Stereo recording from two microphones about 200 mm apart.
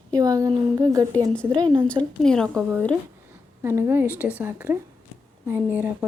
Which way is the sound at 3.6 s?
10° right (ahead or behind).